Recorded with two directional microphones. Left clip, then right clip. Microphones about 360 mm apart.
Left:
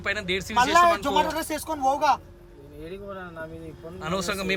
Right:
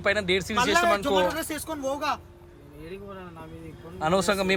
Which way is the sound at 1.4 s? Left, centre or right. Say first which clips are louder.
Left 3 dB; left.